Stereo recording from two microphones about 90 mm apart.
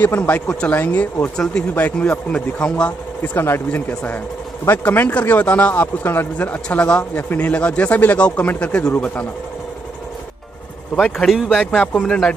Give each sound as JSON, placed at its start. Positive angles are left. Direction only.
{"t": 0.0, "sound": "speech", "side_deg": 20}
{"t": 3.2, "sound": "speech", "side_deg": 25}
{"t": 11.1, "sound": "speech", "side_deg": 0}
{"t": 11.9, "sound": "speech", "side_deg": 5}